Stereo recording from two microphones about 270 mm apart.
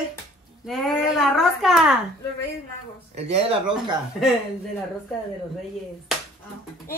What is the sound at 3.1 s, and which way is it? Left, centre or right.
Speech, right.